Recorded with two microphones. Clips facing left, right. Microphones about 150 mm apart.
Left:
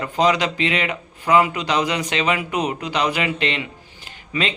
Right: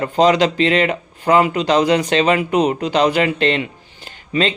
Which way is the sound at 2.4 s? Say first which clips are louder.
Right 7 dB; 25° right (ahead or behind).